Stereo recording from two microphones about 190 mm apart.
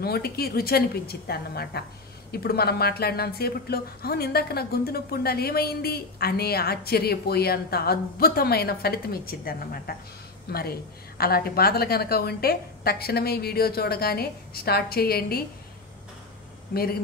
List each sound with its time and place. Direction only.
0.0 s a woman's voice: 55° left (ahead or behind)
16.7 s a woman's voice: 50° left (ahead or behind)